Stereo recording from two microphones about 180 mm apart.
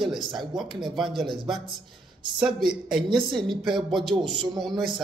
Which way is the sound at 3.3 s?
25° right (ahead or behind).